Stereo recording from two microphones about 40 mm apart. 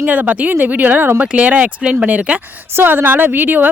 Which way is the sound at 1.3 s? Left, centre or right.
Right.